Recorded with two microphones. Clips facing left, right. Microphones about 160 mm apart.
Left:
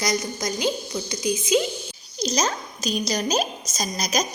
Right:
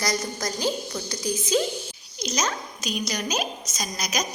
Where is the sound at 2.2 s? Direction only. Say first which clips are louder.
Left 3 dB; 35° left (ahead or behind).